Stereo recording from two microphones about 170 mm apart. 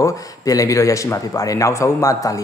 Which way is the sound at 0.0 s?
20° left (ahead or behind).